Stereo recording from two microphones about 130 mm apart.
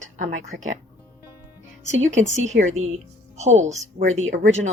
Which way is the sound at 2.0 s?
65° right (ahead or behind).